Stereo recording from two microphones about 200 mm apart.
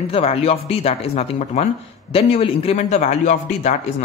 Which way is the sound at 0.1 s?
30° left (ahead or behind).